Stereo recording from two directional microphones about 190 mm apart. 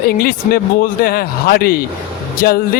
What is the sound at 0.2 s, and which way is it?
A man's voice, 50° left (ahead or behind).